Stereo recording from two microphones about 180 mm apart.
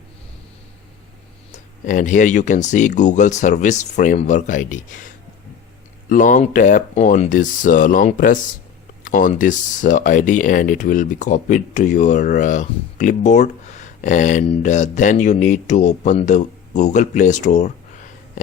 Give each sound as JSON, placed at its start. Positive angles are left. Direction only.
{"t": 1.5, "sound": "speech", "side_deg": 45}